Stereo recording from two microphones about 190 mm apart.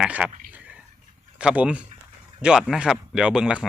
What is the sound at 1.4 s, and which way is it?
Speech, 5° right (ahead or behind).